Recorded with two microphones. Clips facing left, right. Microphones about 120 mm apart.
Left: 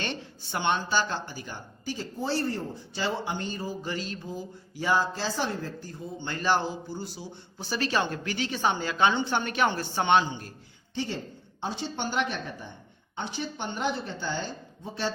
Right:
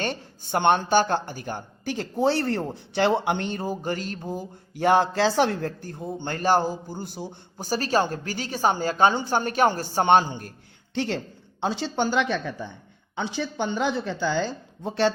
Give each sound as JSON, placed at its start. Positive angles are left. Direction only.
{"t": 0.0, "sound": "speech", "side_deg": -45}
{"t": 10.9, "sound": "speech", "side_deg": -70}
{"t": 11.6, "sound": "speech", "side_deg": -90}